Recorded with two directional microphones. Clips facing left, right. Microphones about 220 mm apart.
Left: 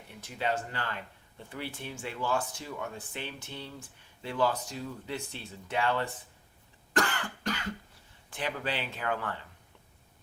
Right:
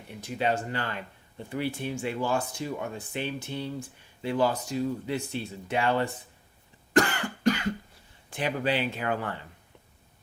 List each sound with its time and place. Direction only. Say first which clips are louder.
0.1 s speech: right 4 dB; 15° right (ahead or behind)
7.1 s cough: right 9 dB; 15° right (ahead or behind)
8.3 s speech: right 6 dB; 15° right (ahead or behind)